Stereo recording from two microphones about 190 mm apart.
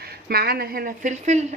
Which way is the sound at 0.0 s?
55° right (ahead or behind).